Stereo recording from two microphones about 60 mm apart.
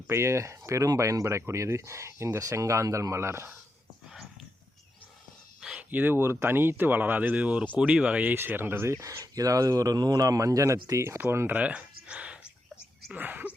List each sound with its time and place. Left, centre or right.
0.1 s speech: right
5.9 s speech: right
8.4 s speech: right
11.2 s speech: right
11.5 s a sound: right
13.1 s speech: right